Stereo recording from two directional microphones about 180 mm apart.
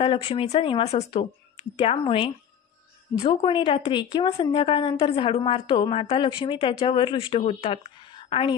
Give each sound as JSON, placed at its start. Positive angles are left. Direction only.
{"t": 0.0, "sound": "a woman's voice", "side_deg": 30}